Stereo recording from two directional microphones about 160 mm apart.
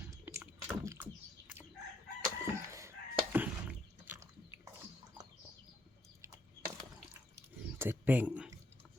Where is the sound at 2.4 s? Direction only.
15° right (ahead or behind).